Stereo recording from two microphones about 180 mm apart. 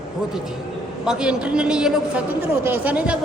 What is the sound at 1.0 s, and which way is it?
Speech, 5° right (ahead or behind).